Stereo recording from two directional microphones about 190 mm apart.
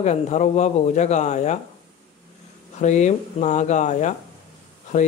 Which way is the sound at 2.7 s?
40° left (ahead or behind).